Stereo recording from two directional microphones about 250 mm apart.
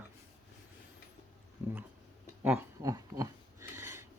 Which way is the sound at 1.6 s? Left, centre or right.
Centre.